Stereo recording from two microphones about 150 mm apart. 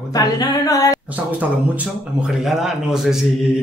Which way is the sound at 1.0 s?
10° right (ahead or behind).